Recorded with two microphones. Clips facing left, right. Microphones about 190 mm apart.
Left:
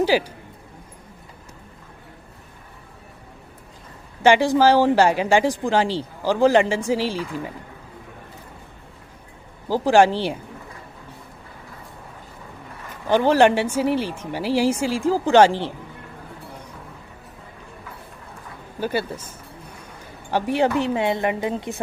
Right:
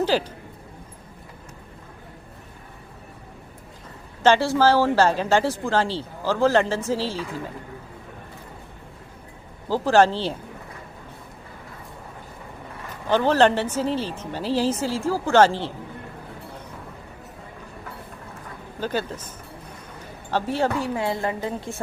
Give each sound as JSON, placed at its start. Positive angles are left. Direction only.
{"t": 0.0, "sound": "a woman's voice", "side_deg": 10}
{"t": 4.2, "sound": "a woman's voice", "side_deg": 15}
{"t": 9.6, "sound": "a woman's voice", "side_deg": 15}
{"t": 13.1, "sound": "a woman's voice", "side_deg": 15}
{"t": 18.8, "sound": "a woman's voice", "side_deg": 10}
{"t": 20.3, "sound": "a woman's voice", "side_deg": 15}